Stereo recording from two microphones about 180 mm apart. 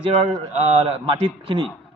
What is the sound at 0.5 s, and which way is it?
A man's voice, 35° right (ahead or behind).